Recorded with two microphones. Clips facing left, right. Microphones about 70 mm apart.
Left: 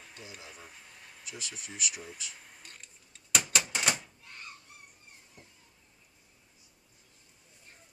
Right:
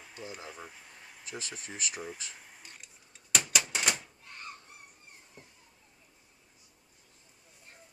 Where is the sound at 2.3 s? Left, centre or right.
Centre.